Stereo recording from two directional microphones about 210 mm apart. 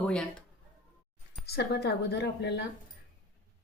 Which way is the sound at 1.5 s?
50° left (ahead or behind).